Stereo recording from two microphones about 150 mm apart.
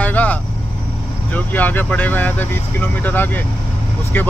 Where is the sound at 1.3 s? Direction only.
10° left (ahead or behind).